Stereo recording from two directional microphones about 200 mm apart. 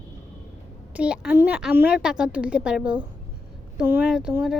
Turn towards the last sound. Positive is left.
turn(degrees=-5)  # may be behind; listen again after turning